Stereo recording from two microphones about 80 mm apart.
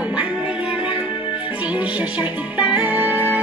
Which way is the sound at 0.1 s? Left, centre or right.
Centre.